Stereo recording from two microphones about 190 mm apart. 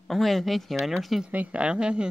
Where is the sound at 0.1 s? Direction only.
Centre (ahead or behind).